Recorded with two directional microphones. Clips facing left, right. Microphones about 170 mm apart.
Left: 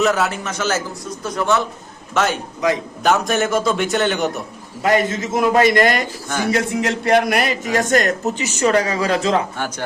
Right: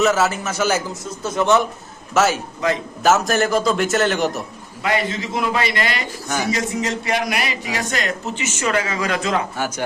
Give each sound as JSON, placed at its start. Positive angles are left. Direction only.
{"t": 0.0, "sound": "a man's voice", "side_deg": 0}
{"t": 1.2, "sound": "speech", "side_deg": -20}
{"t": 2.1, "sound": "a man's voice", "side_deg": -5}
{"t": 4.8, "sound": "a man's voice", "side_deg": 45}
{"t": 6.4, "sound": "a man's voice", "side_deg": 60}
{"t": 9.6, "sound": "speech", "side_deg": -10}